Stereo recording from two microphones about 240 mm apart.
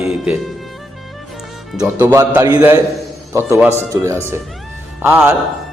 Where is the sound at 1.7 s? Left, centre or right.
Centre.